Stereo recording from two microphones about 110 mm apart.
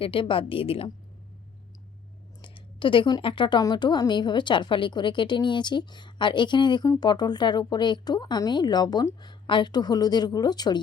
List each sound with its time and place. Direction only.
0.0 s a woman's voice: 55° left (ahead or behind)
2.4 s a woman's voice: 50° left (ahead or behind)